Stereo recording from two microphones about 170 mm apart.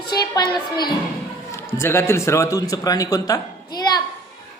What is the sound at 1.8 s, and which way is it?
A man's voice, 15° left (ahead or behind).